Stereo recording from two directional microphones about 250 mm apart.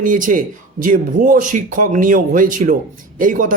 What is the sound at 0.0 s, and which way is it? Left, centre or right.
A man's voice, right.